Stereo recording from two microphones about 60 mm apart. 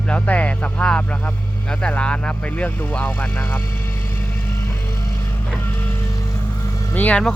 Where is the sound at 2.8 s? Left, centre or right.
Left.